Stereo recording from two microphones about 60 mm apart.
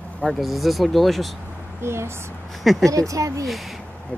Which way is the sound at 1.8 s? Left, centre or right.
Right.